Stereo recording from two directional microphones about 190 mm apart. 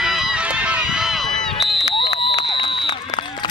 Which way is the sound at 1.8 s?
25° left (ahead or behind).